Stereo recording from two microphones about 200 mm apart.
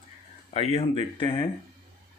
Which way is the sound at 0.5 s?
30° left (ahead or behind).